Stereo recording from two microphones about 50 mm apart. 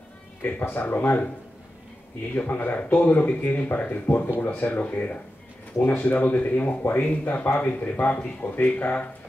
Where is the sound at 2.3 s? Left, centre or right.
Left.